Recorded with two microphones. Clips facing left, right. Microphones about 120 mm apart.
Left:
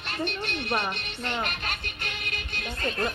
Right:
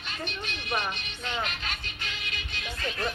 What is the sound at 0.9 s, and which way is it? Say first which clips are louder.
Music: left 2 dB; 60° left (ahead or behind).